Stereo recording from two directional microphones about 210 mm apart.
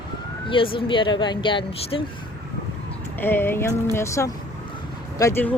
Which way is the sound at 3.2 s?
10° left (ahead or behind).